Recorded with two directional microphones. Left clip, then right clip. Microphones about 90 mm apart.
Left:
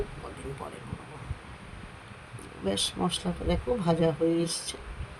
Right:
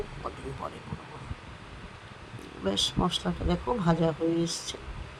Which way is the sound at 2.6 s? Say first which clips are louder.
Right 2 dB; 10° right (ahead or behind).